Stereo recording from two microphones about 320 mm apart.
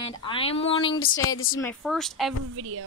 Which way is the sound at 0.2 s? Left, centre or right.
Centre.